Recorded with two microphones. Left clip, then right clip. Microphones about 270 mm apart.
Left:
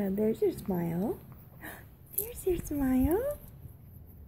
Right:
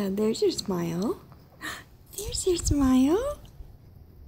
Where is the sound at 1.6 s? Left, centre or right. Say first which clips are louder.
Right 9 dB; centre.